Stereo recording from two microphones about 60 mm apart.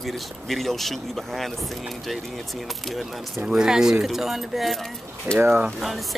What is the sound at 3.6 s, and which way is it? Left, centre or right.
Speech, centre.